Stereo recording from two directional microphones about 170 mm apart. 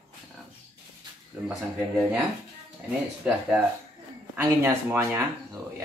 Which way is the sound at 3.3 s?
5° right (ahead or behind).